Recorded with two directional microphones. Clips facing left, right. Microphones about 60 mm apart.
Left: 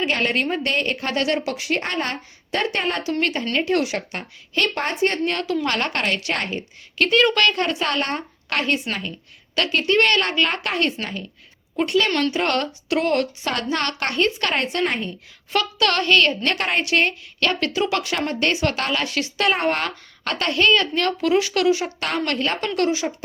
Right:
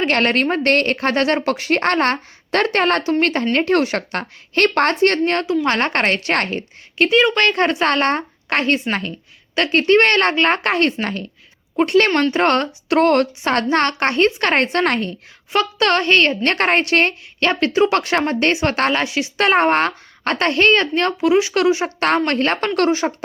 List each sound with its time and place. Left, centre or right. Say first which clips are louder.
0.0 s a woman's voice: right 5 dB; right
3.0 s a woman's voice: right 5 dB; right
6.3 s a woman's voice: right 6 dB; right
7.0 s speech: right 3 dB; centre
7.3 s a woman's voice: right 4 dB; right
14.5 s speech: right 5 dB; right
14.8 s a woman's voice: right 5 dB; right
15.5 s a woman's voice: right 4 dB; right
17.4 s a woman's voice: right 6 dB; right
19.0 s speech: right 3 dB; centre
19.4 s a woman's voice: right 6 dB; right
21.2 s speech: right 5 dB; right
21.8 s speech: right 7 dB; right